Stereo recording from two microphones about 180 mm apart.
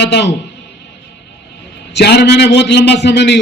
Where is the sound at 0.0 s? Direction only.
70° left (ahead or behind).